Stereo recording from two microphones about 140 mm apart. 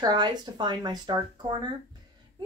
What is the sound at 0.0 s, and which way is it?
Speech, 30° right (ahead or behind).